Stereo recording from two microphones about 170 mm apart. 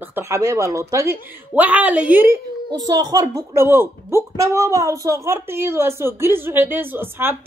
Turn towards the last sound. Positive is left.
turn(degrees=-10)  # may be behind; listen again after turning